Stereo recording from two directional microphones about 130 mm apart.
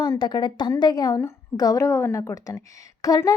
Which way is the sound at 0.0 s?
30° left (ahead or behind).